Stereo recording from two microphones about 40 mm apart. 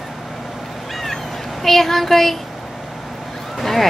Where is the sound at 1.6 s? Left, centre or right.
Centre.